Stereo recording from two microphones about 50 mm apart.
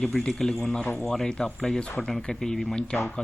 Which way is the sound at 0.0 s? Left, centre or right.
Centre.